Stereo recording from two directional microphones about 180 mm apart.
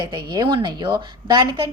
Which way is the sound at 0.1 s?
25° right (ahead or behind).